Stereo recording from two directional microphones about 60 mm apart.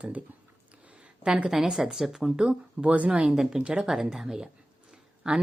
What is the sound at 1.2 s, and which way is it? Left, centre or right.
Speech, centre.